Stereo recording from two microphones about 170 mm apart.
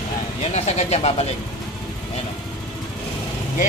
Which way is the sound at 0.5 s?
40° left (ahead or behind).